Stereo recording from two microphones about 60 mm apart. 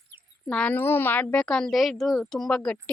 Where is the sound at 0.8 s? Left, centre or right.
Left.